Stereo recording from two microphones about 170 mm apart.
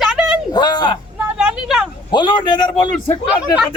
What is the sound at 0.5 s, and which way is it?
Speech, 25° left (ahead or behind).